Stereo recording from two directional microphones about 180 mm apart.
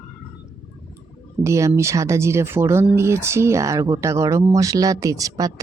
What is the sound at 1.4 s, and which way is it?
Speech, 15° right (ahead or behind).